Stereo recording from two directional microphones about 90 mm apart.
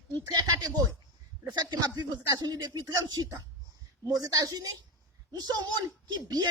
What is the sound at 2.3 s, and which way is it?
A man's voice, 45° right (ahead or behind).